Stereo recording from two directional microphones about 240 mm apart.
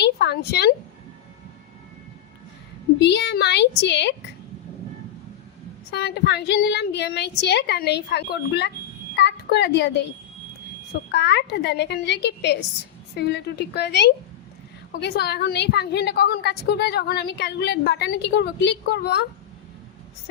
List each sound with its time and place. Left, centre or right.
0.0 s a sound: left
3.0 s a woman's voice: left
5.9 s a woman's voice: left
11.1 s a woman's voice: left